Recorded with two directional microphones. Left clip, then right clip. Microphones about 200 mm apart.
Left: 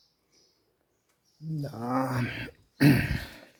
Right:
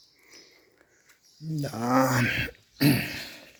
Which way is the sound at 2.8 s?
30° left (ahead or behind).